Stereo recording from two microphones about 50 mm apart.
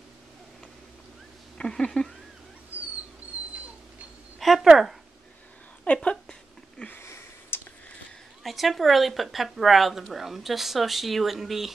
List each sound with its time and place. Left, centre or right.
1.6 s speech: centre
4.4 s a sound: centre
4.6 s speech: centre
5.9 s speech: centre
6.9 s a sound: left
8.5 s speech: centre